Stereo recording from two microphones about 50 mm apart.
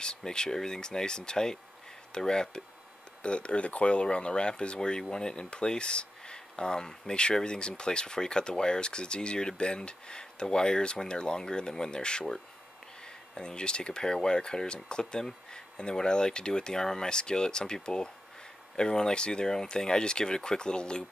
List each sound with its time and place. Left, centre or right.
0.0 s speech: centre